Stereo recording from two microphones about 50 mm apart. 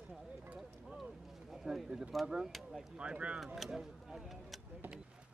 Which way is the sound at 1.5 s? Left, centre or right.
Centre.